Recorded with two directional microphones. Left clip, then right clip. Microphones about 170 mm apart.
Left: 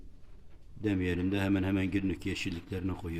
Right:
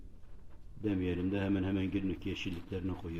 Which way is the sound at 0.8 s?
40° left (ahead or behind).